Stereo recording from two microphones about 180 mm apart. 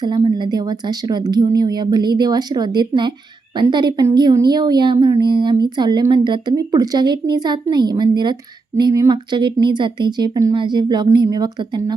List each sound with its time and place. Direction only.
0.0 s a woman's voice: 25° right (ahead or behind)